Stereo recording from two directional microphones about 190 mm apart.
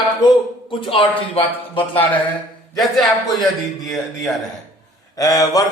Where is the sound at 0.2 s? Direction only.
25° left (ahead or behind).